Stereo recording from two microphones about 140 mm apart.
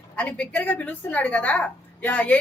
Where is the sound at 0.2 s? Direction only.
10° left (ahead or behind).